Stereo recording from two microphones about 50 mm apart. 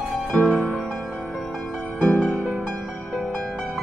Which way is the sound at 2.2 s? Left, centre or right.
Left.